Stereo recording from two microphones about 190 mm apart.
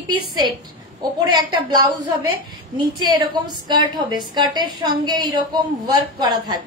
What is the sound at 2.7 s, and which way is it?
A woman's voice, 25° right (ahead or behind).